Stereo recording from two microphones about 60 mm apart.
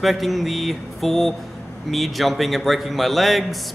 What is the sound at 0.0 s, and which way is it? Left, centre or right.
A man's voice, centre.